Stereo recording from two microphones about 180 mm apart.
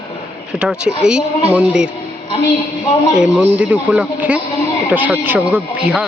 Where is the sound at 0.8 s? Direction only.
5° right (ahead or behind).